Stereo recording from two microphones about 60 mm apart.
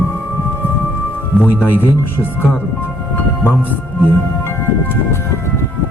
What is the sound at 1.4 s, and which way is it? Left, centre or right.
Speech, left.